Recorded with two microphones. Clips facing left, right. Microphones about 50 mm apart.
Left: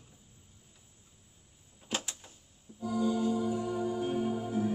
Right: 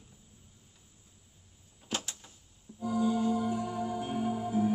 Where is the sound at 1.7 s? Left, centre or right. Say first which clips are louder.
Even; centre.